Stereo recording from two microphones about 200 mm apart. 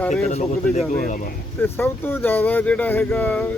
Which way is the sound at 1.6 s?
10° left (ahead or behind).